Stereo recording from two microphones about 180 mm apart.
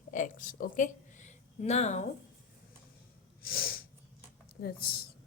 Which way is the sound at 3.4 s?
55° left (ahead or behind).